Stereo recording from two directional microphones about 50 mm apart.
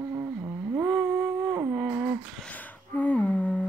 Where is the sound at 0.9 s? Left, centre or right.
Right.